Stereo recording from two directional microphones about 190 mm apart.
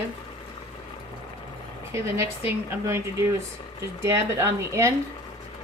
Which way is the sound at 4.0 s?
15° right (ahead or behind).